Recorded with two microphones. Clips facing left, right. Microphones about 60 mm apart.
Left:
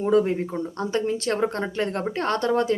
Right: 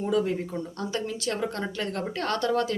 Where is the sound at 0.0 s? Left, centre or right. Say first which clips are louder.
Left 5 dB; left.